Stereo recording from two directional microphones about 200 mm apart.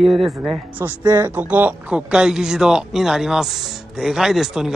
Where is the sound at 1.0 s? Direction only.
20° right (ahead or behind).